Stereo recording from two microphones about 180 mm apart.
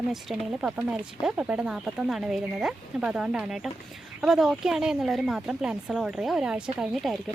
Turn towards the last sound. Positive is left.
turn(degrees=0)  # may be behind; listen again after turning